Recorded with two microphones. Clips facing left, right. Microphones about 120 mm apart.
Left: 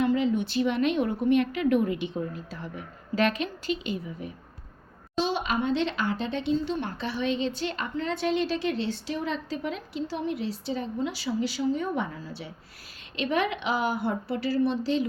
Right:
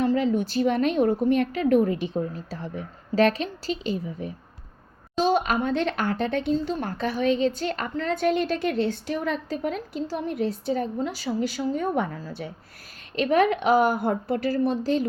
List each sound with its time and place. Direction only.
0.0 s a woman's voice: 35° right (ahead or behind)
5.2 s speech: 45° right (ahead or behind)